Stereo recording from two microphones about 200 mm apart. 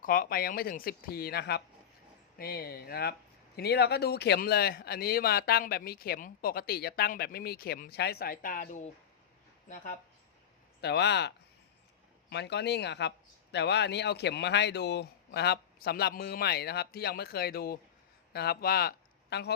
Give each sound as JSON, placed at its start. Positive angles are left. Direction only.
{"t": 0.0, "sound": "speech", "side_deg": 45}
{"t": 10.8, "sound": "speech", "side_deg": 55}
{"t": 12.3, "sound": "speech", "side_deg": 60}